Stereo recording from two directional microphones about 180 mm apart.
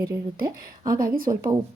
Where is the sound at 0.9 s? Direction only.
50° right (ahead or behind).